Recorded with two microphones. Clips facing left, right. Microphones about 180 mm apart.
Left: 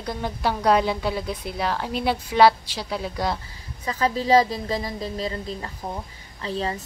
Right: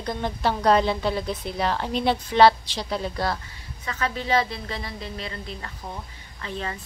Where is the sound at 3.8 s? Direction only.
35° left (ahead or behind).